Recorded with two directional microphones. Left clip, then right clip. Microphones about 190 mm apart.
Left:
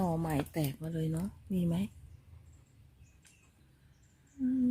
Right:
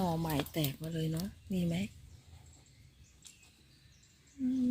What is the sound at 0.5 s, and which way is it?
Speech, 15° left (ahead or behind).